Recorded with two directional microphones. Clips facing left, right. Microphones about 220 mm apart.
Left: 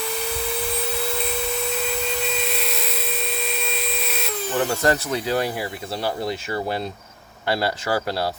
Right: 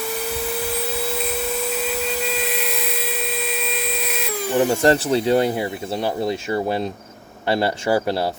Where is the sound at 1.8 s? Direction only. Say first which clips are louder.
Right 2 dB; 5° right (ahead or behind).